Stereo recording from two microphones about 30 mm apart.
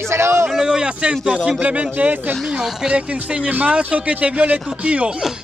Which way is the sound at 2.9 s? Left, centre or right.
Right.